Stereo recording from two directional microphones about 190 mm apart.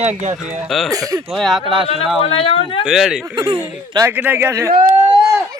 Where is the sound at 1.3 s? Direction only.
Centre (ahead or behind).